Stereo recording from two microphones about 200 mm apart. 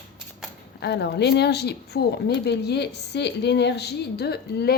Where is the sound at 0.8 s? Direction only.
55° left (ahead or behind).